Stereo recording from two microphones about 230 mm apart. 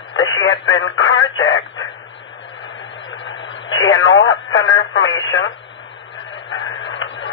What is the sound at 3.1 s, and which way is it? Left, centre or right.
Radio, left.